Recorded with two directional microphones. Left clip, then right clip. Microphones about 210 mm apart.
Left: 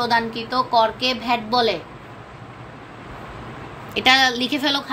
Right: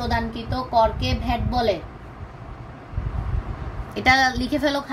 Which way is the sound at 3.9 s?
35° right (ahead or behind).